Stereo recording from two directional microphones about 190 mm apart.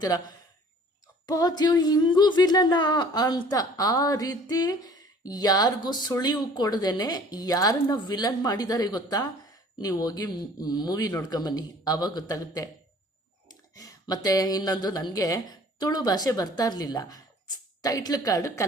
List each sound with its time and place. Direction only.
1.3 s a woman's voice: 20° left (ahead or behind)